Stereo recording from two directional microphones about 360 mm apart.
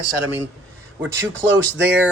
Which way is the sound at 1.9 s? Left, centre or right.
Centre.